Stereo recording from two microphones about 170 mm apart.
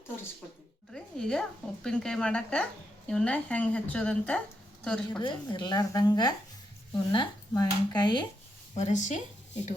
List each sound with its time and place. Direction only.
0.9 s a woman's voice: 5° left (ahead or behind)
5.2 s speech: 25° left (ahead or behind)
8.7 s speech: 45° left (ahead or behind)